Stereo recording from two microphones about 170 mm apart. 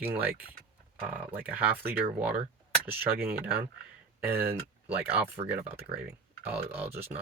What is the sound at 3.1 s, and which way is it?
Speech, 10° right (ahead or behind).